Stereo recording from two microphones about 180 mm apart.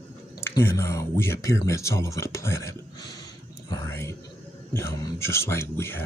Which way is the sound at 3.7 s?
20° left (ahead or behind).